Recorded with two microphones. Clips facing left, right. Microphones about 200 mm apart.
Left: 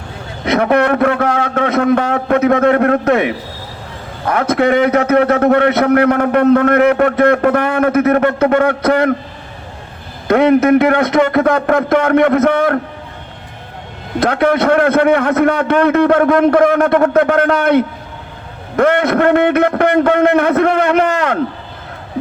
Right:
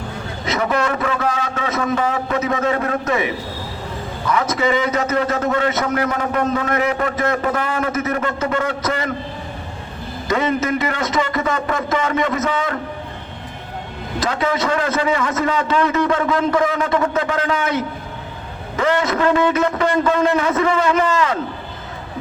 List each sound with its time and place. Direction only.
0.4 s a man's voice: 60° left (ahead or behind)
10.2 s a man's voice: 60° left (ahead or behind)
14.2 s a man's voice: 60° left (ahead or behind)